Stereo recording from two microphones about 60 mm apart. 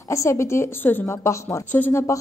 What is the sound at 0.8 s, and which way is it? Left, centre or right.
Speech, left.